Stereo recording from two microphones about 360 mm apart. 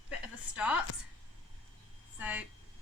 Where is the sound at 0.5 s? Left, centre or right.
Centre.